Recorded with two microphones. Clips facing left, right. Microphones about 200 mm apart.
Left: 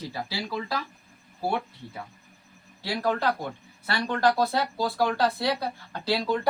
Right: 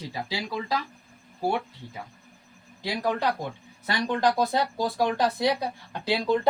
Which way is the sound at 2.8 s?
15° right (ahead or behind).